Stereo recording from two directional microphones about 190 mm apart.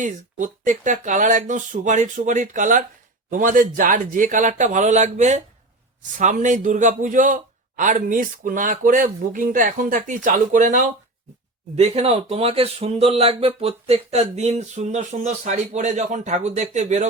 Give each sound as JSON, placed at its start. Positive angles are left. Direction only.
{"t": 0.0, "sound": "a man's voice", "side_deg": -40}